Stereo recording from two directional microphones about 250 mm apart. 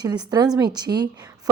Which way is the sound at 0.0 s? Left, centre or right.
Centre.